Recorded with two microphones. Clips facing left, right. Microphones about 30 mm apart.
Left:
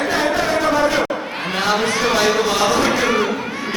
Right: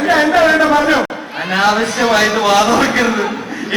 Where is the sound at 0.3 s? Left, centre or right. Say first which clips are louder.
Right 7 dB; right.